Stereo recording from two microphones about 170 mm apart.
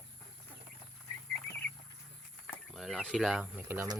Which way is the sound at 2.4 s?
Centre (ahead or behind).